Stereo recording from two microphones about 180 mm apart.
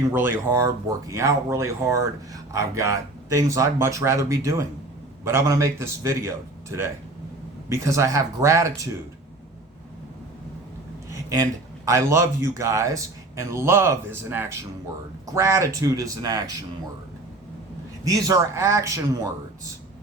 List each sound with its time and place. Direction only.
0.1 s speech: 10° right (ahead or behind)
11.1 s a sound: 20° right (ahead or behind)
11.9 s speech: 15° right (ahead or behind)
18.0 s speech: 20° right (ahead or behind)